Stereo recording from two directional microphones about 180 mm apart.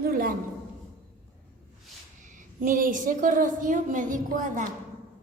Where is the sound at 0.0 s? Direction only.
55° right (ahead or behind).